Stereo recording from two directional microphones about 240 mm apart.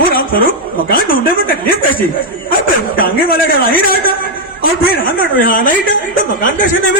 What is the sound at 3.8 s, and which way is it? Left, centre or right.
A woman's voice, left.